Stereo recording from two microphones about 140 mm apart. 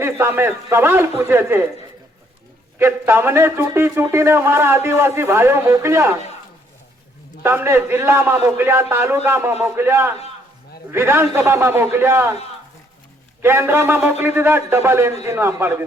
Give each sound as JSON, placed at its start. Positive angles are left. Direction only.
{"t": 0.0, "sound": "a man's voice", "side_deg": -15}
{"t": 2.7, "sound": "a man's voice", "side_deg": -15}
{"t": 7.4, "sound": "a man's voice", "side_deg": -20}
{"t": 13.4, "sound": "a man's voice", "side_deg": -15}